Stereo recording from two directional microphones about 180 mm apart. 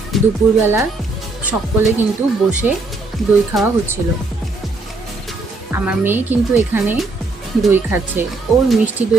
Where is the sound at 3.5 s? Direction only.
Centre (ahead or behind).